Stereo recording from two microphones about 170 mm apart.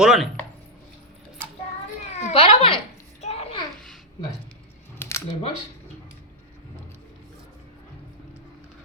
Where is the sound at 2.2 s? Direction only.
35° left (ahead or behind).